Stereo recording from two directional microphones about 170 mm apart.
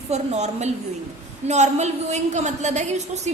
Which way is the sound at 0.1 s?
40° right (ahead or behind).